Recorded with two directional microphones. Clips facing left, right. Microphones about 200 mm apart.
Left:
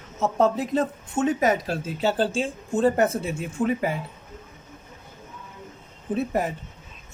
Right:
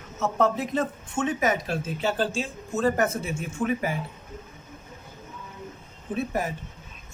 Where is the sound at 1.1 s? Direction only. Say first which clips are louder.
Left 4 dB; 35° left (ahead or behind).